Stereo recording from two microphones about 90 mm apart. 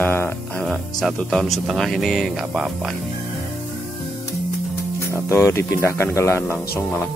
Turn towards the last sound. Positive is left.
turn(degrees=25)  # may be behind; listen again after turning